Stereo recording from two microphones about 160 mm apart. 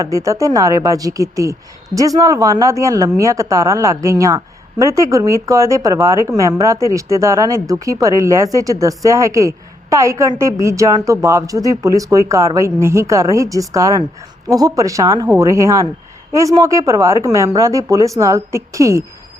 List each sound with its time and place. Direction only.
0.0 s a woman's voice: 20° right (ahead or behind)